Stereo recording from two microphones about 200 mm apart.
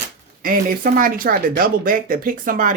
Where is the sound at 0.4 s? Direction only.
45° right (ahead or behind).